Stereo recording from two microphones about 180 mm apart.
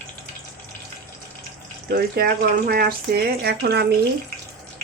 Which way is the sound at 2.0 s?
60° right (ahead or behind).